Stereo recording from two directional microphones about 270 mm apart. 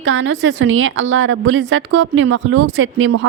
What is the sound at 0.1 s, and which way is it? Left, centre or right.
A woman's voice, right.